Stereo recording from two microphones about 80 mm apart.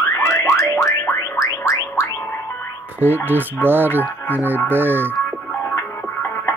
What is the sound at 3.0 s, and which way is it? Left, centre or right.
Speech, right.